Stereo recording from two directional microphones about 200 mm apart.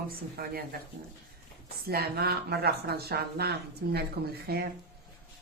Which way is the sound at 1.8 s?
50° right (ahead or behind).